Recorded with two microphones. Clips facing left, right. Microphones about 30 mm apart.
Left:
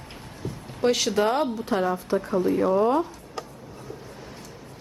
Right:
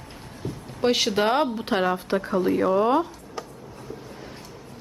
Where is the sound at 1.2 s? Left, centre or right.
Right.